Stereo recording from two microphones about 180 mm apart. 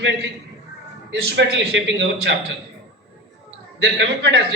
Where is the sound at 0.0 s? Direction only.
80° right.